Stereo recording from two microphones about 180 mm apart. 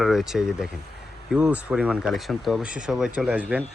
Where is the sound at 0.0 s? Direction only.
Centre (ahead or behind).